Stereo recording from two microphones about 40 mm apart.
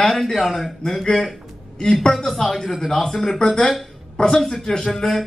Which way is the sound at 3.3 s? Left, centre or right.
Centre.